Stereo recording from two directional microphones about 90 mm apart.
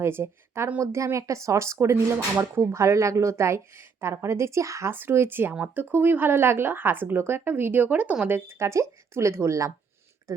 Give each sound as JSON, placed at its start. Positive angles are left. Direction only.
{"t": 0.0, "sound": "speech", "side_deg": -30}
{"t": 8.3, "sound": "speech", "side_deg": -30}